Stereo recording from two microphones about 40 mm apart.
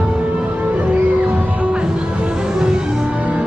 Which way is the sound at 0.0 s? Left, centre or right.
Right.